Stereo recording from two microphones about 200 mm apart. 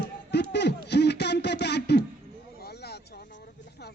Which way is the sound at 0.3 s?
60° left (ahead or behind).